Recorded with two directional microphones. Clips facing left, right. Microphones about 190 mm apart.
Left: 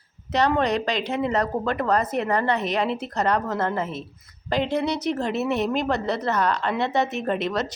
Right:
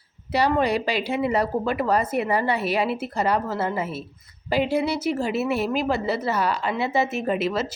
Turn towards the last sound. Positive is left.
turn(degrees=-5)  # may be behind; listen again after turning